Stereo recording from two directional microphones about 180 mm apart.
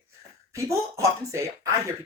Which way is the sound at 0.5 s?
15° right (ahead or behind).